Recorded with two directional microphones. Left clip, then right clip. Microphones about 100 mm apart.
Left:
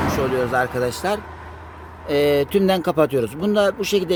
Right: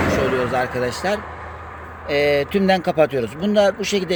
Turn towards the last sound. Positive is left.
turn(degrees=50)  # may be behind; listen again after turning